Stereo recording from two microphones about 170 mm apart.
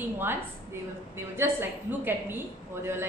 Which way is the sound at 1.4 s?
10° right (ahead or behind).